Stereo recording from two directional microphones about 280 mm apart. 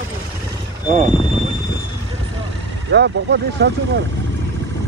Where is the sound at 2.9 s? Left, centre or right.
Right.